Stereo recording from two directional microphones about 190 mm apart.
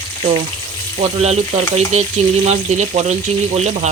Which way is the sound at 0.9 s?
35° right (ahead or behind).